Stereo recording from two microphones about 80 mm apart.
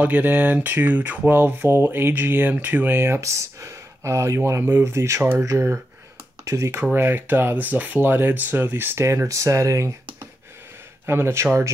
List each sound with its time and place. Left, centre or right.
0.0 s speech: right
3.2 s speech: right
6.8 s speech: right
11.1 s speech: right